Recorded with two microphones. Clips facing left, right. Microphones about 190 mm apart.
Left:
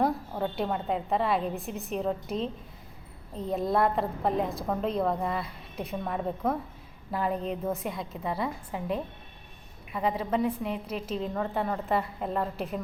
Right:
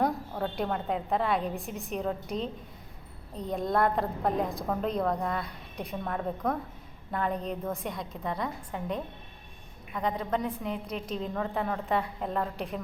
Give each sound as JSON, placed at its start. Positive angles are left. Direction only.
{"t": 0.0, "sound": "a woman's voice", "side_deg": 5}